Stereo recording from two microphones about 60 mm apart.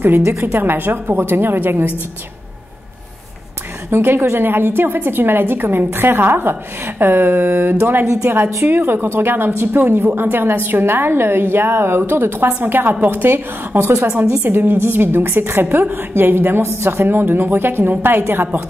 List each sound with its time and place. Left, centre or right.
0.2 s a woman's voice: right
3.9 s a woman's voice: right
13.7 s a woman's voice: right
14.0 s a woman's voice: centre
14.4 s a woman's voice: right